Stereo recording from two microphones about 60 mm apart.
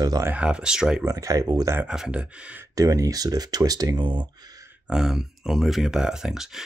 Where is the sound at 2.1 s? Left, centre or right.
Centre.